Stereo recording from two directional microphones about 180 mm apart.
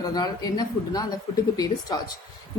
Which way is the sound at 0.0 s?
20° left (ahead or behind).